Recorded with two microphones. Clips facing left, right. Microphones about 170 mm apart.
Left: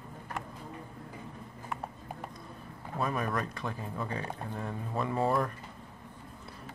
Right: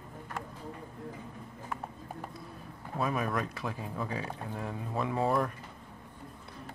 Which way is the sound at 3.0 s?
Centre (ahead or behind).